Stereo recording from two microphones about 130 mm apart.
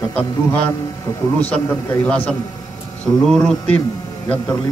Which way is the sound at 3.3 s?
5° left (ahead or behind).